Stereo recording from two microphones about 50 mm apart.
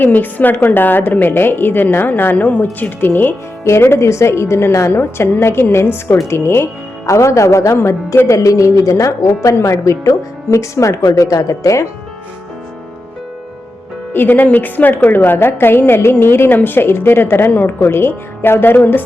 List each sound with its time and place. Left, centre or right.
0.0 s a woman's voice: left
2.3 s a woman's voice: left
3.6 s a woman's voice: left
4.9 s a woman's voice: left
7.8 s speech: left
14.1 s a woman's voice: left